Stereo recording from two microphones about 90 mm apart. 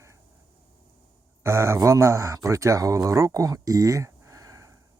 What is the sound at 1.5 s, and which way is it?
Speech, 30° right (ahead or behind).